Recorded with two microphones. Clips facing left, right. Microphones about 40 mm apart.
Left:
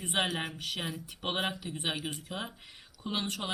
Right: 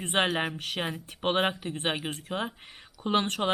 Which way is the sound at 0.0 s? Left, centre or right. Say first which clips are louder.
Right 5 dB; right.